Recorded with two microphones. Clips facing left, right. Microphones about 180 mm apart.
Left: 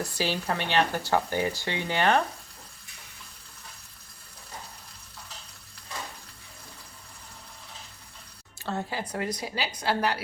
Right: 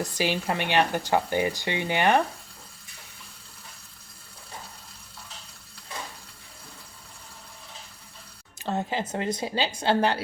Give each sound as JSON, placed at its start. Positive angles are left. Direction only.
{"t": 0.0, "sound": "speech", "side_deg": -15}
{"t": 8.5, "sound": "speech", "side_deg": -20}